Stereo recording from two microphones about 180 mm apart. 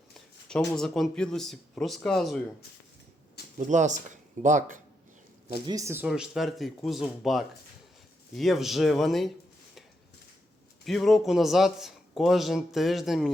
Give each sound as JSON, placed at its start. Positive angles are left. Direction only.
{"t": 0.4, "sound": "a man's voice", "side_deg": 5}
{"t": 3.6, "sound": "speech", "side_deg": -45}
{"t": 5.6, "sound": "speech", "side_deg": -20}
{"t": 6.1, "sound": "a man's voice", "side_deg": 0}
{"t": 10.8, "sound": "a man's voice", "side_deg": 0}